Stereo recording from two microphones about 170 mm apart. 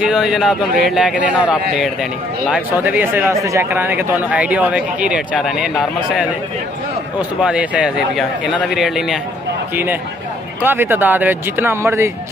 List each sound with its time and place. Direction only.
0.0 s speech: centre (ahead or behind)
10.6 s speech: 10° right (ahead or behind)